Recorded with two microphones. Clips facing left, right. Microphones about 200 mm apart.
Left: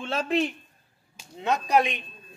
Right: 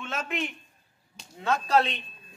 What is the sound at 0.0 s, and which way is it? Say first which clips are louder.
Speech: left 7 dB; 30° left (ahead or behind).